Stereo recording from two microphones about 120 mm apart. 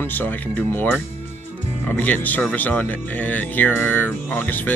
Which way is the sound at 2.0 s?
15° left (ahead or behind).